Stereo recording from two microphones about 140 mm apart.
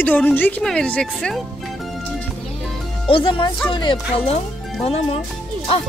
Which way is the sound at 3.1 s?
35° left (ahead or behind).